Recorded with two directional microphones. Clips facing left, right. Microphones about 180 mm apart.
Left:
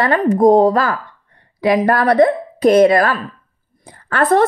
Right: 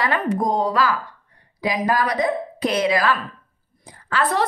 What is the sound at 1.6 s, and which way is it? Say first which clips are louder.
A woman's voice: left 7 dB; 60° left (ahead or behind).